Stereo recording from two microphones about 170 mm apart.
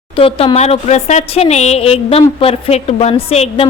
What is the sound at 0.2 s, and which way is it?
A woman's voice, 35° left (ahead or behind).